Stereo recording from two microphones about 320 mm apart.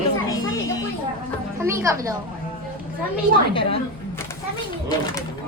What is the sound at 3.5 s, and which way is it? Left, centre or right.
Speech, centre.